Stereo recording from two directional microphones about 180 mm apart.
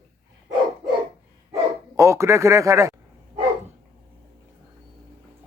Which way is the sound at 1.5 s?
15° right (ahead or behind).